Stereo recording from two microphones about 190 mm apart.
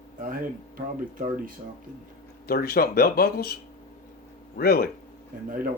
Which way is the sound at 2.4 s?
55° left (ahead or behind).